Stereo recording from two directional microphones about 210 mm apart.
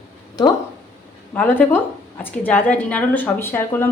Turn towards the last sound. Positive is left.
turn(degrees=10)  # may be behind; listen again after turning